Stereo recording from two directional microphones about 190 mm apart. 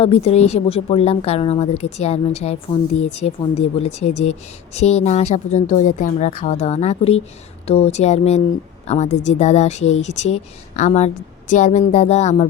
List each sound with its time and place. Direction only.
0.0 s a woman's voice: 30° left (ahead or behind)